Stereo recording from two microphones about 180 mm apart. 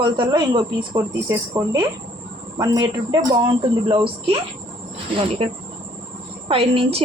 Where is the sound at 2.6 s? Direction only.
25° right (ahead or behind).